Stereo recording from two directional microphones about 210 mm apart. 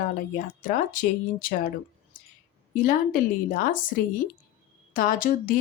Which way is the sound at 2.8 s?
40° left (ahead or behind).